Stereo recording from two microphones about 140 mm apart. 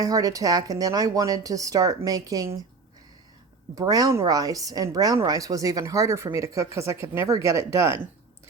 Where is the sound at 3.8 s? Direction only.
25° right (ahead or behind).